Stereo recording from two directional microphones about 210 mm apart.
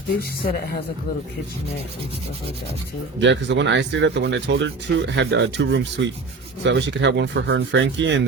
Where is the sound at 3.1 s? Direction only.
60° right (ahead or behind).